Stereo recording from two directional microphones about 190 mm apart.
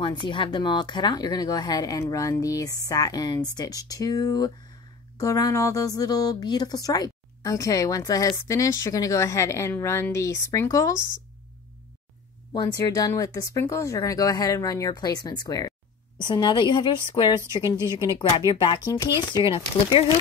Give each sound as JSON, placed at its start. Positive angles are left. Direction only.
{"t": 0.3, "sound": "speech", "side_deg": 25}
{"t": 12.5, "sound": "speech", "side_deg": 20}
{"t": 17.6, "sound": "speech", "side_deg": -15}
{"t": 18.5, "sound": "speech", "side_deg": 25}